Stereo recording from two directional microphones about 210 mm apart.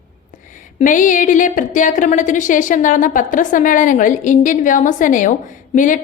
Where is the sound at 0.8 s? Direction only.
35° left (ahead or behind).